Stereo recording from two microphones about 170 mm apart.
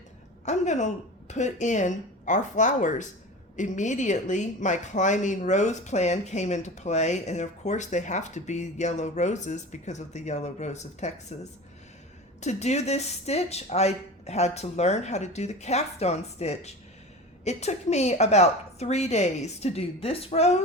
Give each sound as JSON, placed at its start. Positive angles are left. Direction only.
{"t": 0.4, "sound": "speech", "side_deg": 45}
{"t": 12.4, "sound": "speech", "side_deg": 40}